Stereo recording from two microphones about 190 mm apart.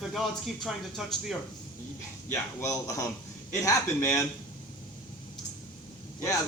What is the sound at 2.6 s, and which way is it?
A man's voice, 15° left (ahead or behind).